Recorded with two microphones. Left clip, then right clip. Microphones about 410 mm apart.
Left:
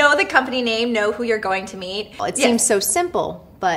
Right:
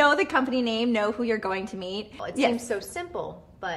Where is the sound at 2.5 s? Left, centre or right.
Left.